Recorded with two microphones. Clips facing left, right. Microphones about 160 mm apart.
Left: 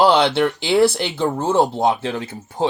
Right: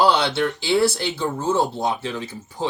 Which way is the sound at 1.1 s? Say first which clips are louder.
Left 4 dB; 60° left (ahead or behind).